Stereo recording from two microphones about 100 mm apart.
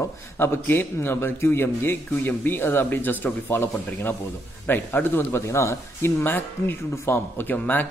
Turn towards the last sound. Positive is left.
turn(degrees=15)  # may be behind; listen again after turning